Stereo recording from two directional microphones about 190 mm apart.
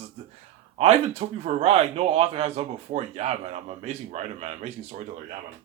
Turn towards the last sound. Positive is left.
turn(degrees=-35)  # may be behind; listen again after turning